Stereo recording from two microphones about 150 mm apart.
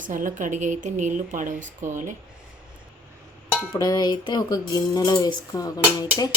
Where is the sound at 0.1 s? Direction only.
60° right (ahead or behind).